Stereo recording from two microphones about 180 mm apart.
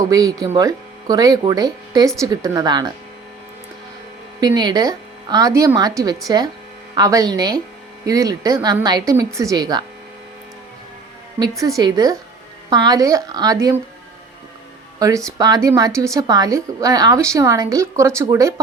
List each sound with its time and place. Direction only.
0.0 s speech: 20° right (ahead or behind)
4.4 s speech: 25° right (ahead or behind)
11.8 s speech: 20° right (ahead or behind)
14.9 s a woman's voice: 20° right (ahead or behind)